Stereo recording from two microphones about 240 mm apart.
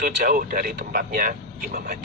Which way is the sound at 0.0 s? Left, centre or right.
Right.